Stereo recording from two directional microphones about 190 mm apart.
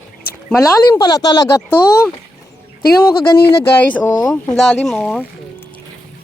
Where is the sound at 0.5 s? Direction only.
15° left (ahead or behind).